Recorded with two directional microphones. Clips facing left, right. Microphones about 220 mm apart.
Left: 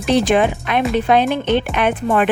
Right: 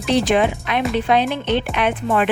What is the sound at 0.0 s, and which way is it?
Speech, 50° left (ahead or behind).